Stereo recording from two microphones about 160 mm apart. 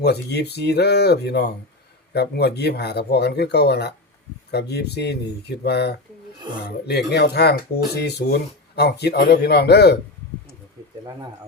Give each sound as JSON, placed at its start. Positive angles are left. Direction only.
{"t": 0.0, "sound": "a man's voice", "side_deg": 90}